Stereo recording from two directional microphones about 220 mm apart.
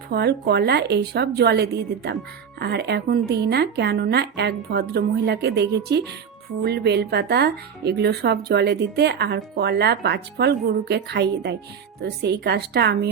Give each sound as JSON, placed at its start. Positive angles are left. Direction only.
{"t": 0.1, "sound": "speech", "side_deg": -45}